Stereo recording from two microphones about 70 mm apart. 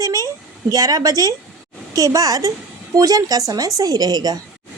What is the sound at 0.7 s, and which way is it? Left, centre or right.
Speech, right.